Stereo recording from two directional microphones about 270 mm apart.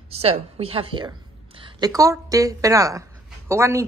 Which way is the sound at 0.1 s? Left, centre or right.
Right.